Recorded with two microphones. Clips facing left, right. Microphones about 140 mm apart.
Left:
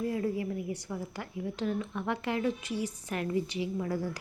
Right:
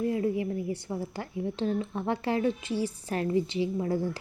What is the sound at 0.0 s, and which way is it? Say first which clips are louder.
A woman's voice: right 4 dB; 25° right (ahead or behind).